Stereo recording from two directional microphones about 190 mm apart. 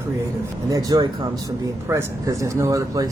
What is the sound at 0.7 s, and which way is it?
Speech, 20° right (ahead or behind).